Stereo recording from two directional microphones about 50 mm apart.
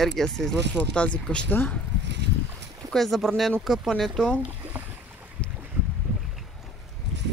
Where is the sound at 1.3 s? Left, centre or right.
Left.